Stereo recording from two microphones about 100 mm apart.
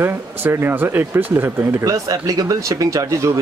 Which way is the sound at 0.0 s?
20° right (ahead or behind).